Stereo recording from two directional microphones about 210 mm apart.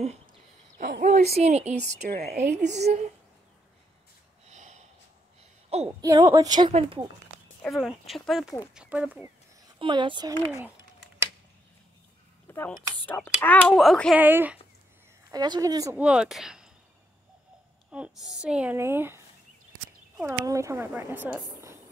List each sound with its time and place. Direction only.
0.0 s a sound: 30° right (ahead or behind)
0.8 s a woman's voice: 45° right (ahead or behind)
2.0 s a woman's voice: 45° right (ahead or behind)
2.8 s a woman's voice: 30° right (ahead or behind)
4.5 s a sound: 35° right (ahead or behind)
5.9 s a woman's voice: 15° right (ahead or behind)
7.6 s speech: centre (ahead or behind)
9.8 s a woman's voice: 25° right (ahead or behind)
12.4 s speech: 10° left (ahead or behind); by 14.6 s 10° right (ahead or behind)
15.3 s speech: 20° right (ahead or behind)
16.0 s speech: 5° right (ahead or behind)
17.9 s speech: 5° right (ahead or behind)